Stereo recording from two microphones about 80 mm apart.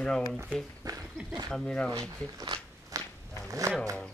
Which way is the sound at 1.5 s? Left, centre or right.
Centre.